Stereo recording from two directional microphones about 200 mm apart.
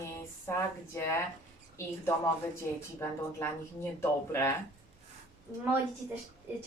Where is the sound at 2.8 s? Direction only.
15° left (ahead or behind).